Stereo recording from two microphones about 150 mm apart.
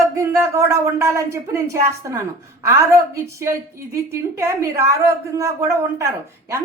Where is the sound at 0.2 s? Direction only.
20° right (ahead or behind).